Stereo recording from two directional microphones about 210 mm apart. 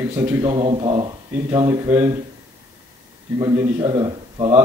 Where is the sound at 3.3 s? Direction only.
20° right (ahead or behind).